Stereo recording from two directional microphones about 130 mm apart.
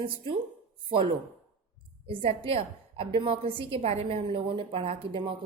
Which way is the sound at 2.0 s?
50° right (ahead or behind).